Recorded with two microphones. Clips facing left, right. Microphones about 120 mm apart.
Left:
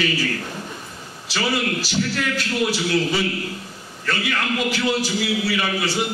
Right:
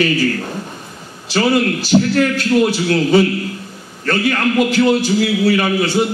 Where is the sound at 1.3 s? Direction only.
50° right (ahead or behind).